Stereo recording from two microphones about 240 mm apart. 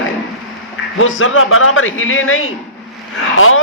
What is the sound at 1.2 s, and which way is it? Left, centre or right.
A man's voice, left.